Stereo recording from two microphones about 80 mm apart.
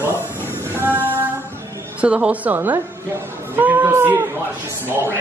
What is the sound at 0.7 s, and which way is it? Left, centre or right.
Female singing, right.